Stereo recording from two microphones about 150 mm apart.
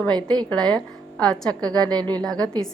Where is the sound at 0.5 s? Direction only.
5° left (ahead or behind).